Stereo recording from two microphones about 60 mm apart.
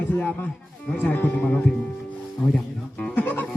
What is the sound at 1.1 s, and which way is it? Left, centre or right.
Speech, left.